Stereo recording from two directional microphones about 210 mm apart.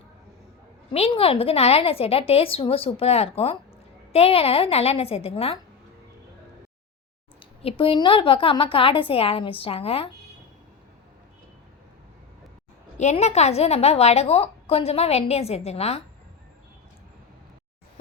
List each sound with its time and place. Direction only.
0.9 s a woman's voice: 25° left (ahead or behind)
7.3 s a woman's voice: 25° left (ahead or behind)
13.0 s a woman's voice: 30° left (ahead or behind)